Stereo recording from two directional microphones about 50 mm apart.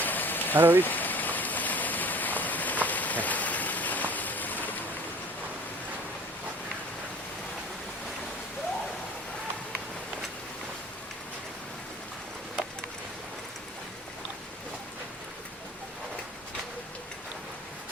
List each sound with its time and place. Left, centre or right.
0.0 s rain: left
0.5 s speech: right
0.8 s rain: left